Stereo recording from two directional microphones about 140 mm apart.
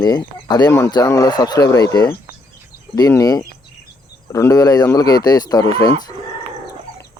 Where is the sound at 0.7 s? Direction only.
20° left (ahead or behind).